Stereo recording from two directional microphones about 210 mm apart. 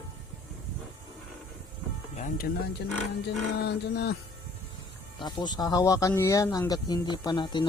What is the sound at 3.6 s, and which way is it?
Speech, 50° left (ahead or behind).